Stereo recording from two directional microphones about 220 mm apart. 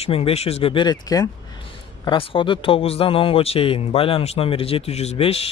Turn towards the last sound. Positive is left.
turn(degrees=25)  # may be behind; listen again after turning